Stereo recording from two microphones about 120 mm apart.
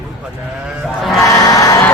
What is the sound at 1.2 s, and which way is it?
Crowd, 30° left (ahead or behind).